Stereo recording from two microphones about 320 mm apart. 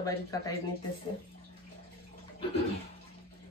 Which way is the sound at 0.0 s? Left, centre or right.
Centre.